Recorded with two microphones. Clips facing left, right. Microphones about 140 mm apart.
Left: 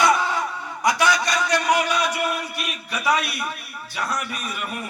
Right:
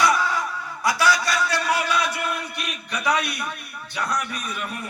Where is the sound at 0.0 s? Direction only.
25° left (ahead or behind); by 3.3 s 5° left (ahead or behind).